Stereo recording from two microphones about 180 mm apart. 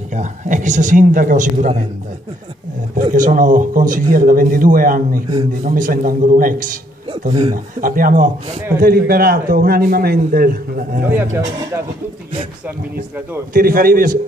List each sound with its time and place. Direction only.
0.1 s a man's voice: 45° right (ahead or behind)
3.0 s a man's voice: 45° right (ahead or behind)
7.1 s speech: 35° right (ahead or behind)
7.5 s a man's voice: 50° right (ahead or behind)
11.1 s speech: 10° right (ahead or behind)
13.5 s a man's voice: 55° right (ahead or behind)